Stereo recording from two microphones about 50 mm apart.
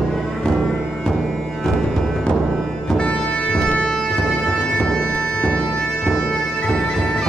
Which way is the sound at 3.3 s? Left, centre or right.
Centre.